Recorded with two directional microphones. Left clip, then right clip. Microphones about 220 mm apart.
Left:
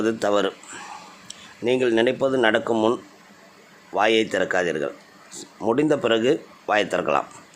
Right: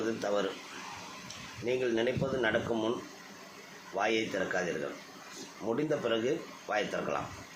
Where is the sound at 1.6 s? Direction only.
50° left (ahead or behind).